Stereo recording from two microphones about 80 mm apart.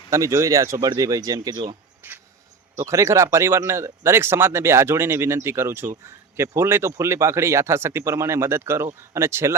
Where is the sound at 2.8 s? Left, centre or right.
Right.